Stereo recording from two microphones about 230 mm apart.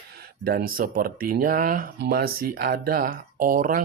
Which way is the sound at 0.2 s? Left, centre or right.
Right.